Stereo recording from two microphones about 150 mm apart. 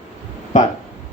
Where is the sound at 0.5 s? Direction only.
55° left (ahead or behind).